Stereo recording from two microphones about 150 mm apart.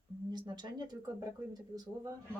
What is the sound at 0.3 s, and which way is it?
Speech, 30° right (ahead or behind).